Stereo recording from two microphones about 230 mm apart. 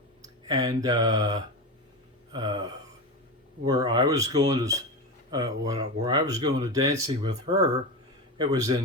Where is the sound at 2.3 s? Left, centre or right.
Centre.